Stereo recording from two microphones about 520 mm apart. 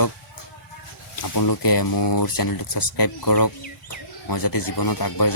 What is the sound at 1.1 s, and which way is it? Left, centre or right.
Speech, left.